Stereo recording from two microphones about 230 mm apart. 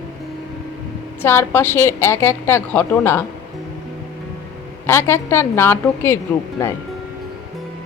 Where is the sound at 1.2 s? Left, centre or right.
Centre.